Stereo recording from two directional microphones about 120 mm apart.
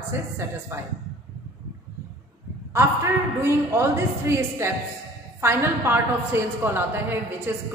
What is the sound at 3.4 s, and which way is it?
A woman's voice, 20° right (ahead or behind).